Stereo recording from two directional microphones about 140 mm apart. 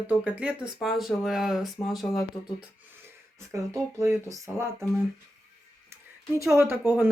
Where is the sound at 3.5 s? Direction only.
25° right (ahead or behind).